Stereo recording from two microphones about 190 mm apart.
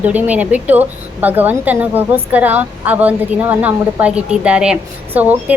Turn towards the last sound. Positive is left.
turn(degrees=-10)  # may be behind; listen again after turning